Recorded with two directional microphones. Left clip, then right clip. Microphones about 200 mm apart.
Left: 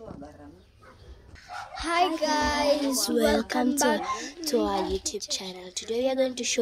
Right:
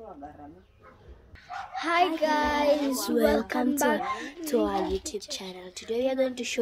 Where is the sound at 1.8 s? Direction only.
15° right (ahead or behind).